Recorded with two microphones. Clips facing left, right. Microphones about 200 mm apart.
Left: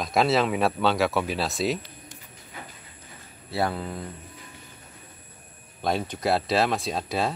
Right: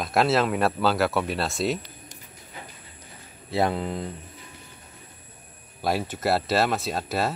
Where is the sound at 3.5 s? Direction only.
20° right (ahead or behind).